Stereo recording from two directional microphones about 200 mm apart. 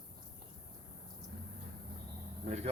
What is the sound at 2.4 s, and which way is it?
Speech, 35° right (ahead or behind).